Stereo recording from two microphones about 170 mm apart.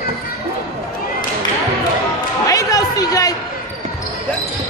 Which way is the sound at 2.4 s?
20° left (ahead or behind).